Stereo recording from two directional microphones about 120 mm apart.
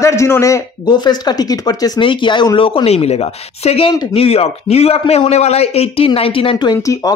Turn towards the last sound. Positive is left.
turn(degrees=30)  # may be behind; listen again after turning